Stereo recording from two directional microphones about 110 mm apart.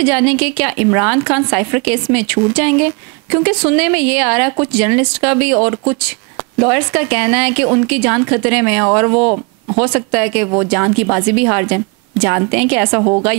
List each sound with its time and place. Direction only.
0.0 s a woman's voice: 10° right (ahead or behind)